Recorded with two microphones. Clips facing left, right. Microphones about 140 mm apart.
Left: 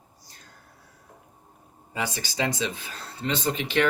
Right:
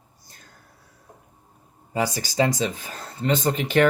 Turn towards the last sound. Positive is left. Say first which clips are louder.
# right 5 dB
turn(degrees=-45)  # may be behind; listen again after turning